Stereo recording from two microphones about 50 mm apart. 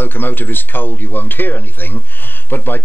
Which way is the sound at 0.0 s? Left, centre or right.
Left.